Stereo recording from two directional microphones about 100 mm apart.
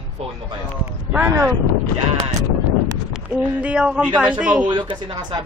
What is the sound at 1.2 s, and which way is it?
Speech, 30° right (ahead or behind).